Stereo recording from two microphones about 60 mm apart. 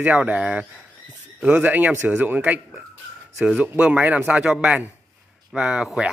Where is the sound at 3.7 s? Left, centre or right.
Right.